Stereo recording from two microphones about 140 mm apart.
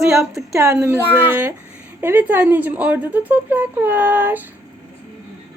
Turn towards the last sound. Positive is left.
turn(degrees=-15)  # may be behind; listen again after turning